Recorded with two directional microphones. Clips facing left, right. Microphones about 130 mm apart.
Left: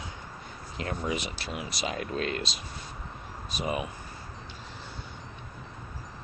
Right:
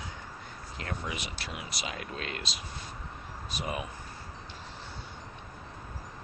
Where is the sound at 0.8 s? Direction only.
30° left (ahead or behind).